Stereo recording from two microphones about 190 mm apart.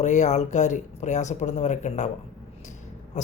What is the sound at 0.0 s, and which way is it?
Speech, 40° left (ahead or behind).